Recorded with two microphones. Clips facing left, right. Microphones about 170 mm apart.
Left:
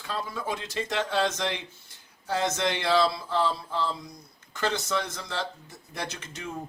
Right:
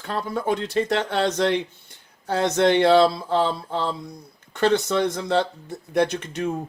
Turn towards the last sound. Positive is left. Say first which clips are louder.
# right 13 dB
turn(degrees=-60)  # may be behind; listen again after turning